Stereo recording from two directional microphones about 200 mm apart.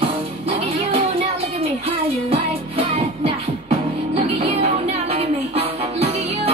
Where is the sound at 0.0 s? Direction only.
30° right (ahead or behind).